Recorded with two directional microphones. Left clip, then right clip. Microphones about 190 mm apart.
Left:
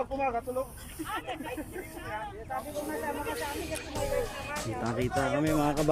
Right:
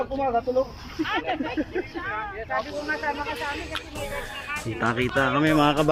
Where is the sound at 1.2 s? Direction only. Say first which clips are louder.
Right 10 dB; 40° right (ahead or behind).